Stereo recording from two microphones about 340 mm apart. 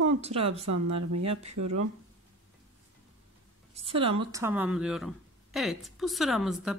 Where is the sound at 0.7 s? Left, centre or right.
Right.